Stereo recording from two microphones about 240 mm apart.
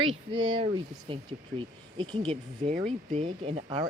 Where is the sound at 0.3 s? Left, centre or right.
Right.